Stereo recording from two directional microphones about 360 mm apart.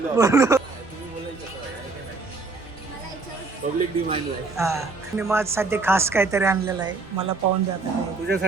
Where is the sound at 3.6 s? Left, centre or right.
Right.